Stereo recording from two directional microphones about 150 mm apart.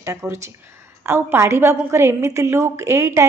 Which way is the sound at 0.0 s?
20° right (ahead or behind).